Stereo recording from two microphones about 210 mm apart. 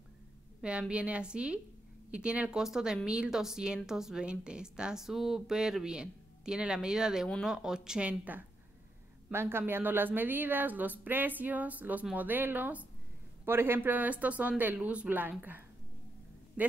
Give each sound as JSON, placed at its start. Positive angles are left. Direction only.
{"t": 0.6, "sound": "a woman's voice", "side_deg": -5}